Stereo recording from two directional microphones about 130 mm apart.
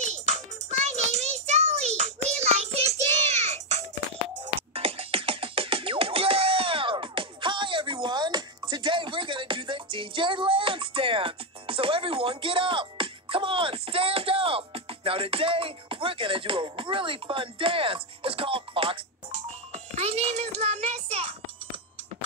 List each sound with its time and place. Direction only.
0.0 s music: 60° right (ahead or behind); by 18.9 s 45° right (ahead or behind)
19.3 s music: 60° right (ahead or behind)